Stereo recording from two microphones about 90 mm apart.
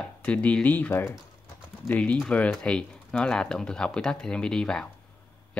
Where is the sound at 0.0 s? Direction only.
15° left (ahead or behind).